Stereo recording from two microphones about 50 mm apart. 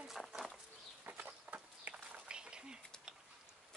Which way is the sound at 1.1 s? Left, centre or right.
Right.